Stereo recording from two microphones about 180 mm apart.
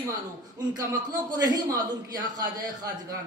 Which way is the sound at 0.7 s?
20° right (ahead or behind).